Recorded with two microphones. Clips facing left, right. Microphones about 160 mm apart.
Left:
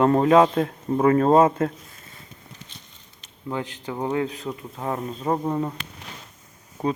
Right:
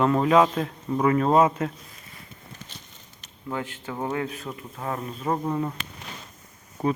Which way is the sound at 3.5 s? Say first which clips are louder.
Left 2 dB; 20° left (ahead or behind).